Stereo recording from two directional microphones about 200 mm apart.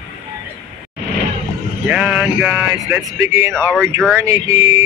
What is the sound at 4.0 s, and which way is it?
Speech, centre (ahead or behind).